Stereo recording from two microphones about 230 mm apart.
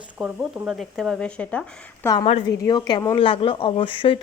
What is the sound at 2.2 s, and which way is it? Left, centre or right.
A woman's voice, left.